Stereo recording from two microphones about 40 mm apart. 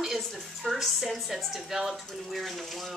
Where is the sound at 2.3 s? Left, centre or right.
Centre.